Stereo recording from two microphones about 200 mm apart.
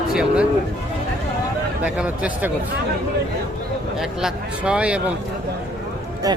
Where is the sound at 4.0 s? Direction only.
5° right (ahead or behind).